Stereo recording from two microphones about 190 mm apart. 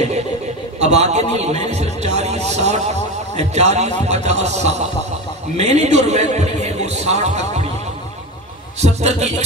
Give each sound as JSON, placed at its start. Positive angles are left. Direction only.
{"t": 0.7, "sound": "a man's voice", "side_deg": -35}
{"t": 8.8, "sound": "a man's voice", "side_deg": -35}